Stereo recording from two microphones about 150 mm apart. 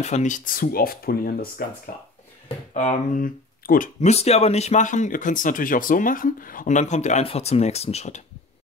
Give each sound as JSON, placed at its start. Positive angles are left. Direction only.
{"t": 0.0, "sound": "speech", "side_deg": 50}
{"t": 1.9, "sound": "speech", "side_deg": 65}
{"t": 2.7, "sound": "speech", "side_deg": 50}
{"t": 3.2, "sound": "speech", "side_deg": 70}
{"t": 4.0, "sound": "speech", "side_deg": 45}